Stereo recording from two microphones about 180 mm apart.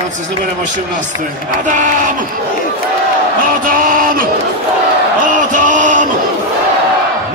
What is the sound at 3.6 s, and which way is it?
Speech, 50° right (ahead or behind).